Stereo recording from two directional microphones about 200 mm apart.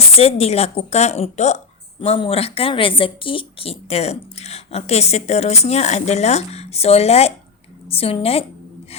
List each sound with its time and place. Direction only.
0.2 s a woman's voice: 30° left (ahead or behind)